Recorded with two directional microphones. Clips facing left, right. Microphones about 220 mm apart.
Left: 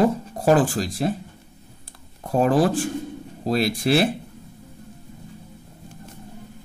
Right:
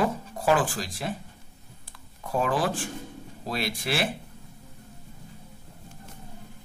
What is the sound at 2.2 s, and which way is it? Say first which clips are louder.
Speech: left 8 dB; 40° left (ahead or behind).